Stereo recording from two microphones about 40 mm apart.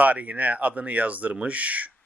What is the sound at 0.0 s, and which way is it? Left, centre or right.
Speech, right.